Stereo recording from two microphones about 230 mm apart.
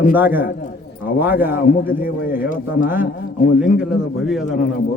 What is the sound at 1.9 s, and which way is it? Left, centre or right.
Speech, centre.